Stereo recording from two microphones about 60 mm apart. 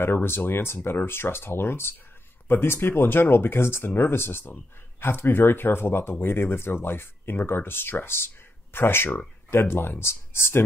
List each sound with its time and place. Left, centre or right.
0.0 s speech: left